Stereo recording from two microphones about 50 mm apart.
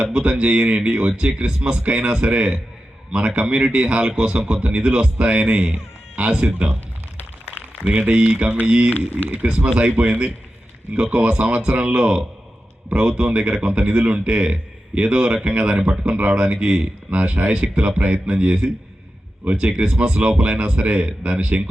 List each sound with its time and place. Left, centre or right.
0.0 s speech: centre
7.2 s a sound: left
7.9 s speech: right
8.9 s speech: left
9.3 s speech: right
16.1 s speech: right